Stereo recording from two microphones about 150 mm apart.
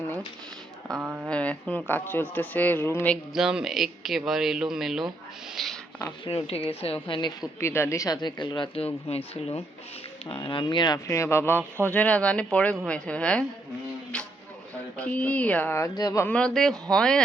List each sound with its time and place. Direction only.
1.0 s speech: 10° right (ahead or behind)
1.3 s speech: 10° left (ahead or behind)
3.3 s speech: 5° right (ahead or behind)
6.2 s speech: 40° left (ahead or behind)
7.6 s speech: 15° left (ahead or behind)
14.9 s speech: 10° left (ahead or behind)
16.2 s speech: 5° left (ahead or behind)